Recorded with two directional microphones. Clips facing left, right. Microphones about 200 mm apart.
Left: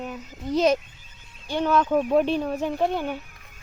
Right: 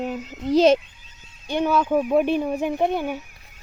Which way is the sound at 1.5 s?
15° right (ahead or behind).